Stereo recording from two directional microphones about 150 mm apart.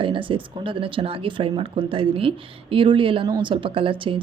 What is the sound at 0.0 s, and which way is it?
Speech, 35° right (ahead or behind).